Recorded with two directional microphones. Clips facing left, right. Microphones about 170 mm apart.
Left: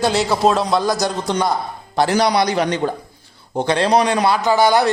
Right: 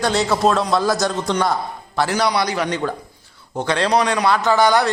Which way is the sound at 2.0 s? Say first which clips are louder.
Left 3 dB; 20° left (ahead or behind).